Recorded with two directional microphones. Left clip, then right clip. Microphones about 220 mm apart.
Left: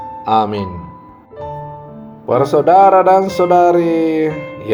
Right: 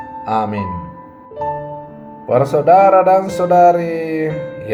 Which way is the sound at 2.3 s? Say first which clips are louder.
Even; 35° left (ahead or behind).